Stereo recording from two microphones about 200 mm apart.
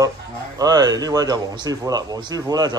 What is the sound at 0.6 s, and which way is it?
Speech, 20° right (ahead or behind).